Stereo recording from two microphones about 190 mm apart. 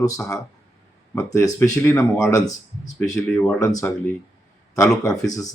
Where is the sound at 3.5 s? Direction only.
15° left (ahead or behind).